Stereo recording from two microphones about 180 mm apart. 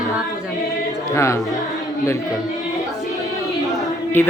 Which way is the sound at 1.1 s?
15° left (ahead or behind).